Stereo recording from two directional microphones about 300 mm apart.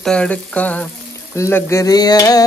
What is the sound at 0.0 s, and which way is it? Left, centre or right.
Frying, centre.